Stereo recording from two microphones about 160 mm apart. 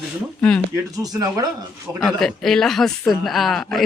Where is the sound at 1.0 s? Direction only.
20° right (ahead or behind).